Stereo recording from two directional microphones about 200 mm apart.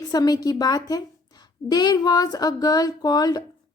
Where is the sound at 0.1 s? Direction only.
20° left (ahead or behind).